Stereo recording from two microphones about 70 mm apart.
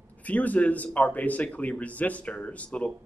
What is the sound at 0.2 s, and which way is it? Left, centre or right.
Speech, left.